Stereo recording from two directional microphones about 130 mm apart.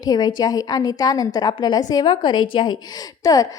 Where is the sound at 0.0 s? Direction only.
30° left (ahead or behind).